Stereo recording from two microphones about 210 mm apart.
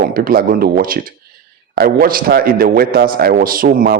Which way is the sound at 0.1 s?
45° right (ahead or behind).